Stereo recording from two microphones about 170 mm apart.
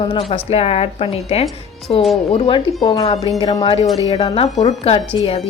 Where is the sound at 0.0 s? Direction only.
30° left (ahead or behind).